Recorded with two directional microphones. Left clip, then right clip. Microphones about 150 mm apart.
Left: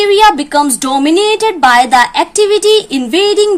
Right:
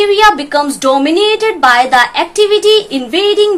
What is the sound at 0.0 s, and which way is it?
A woman's voice, 55° left (ahead or behind).